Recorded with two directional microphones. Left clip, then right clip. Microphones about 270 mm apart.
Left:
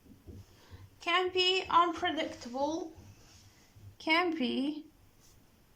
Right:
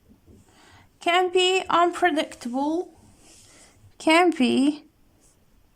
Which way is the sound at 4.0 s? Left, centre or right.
Right.